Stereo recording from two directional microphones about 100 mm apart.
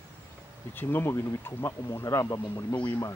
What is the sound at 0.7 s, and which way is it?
Speech, 20° left (ahead or behind).